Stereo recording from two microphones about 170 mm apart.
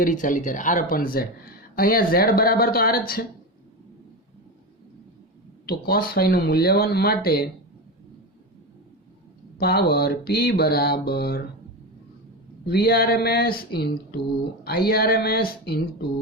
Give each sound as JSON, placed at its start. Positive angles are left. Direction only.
{"t": 0.0, "sound": "speech", "side_deg": 50}
{"t": 5.6, "sound": "speech", "side_deg": 65}
{"t": 9.6, "sound": "mantra", "side_deg": 65}
{"t": 12.6, "sound": "speech", "side_deg": 70}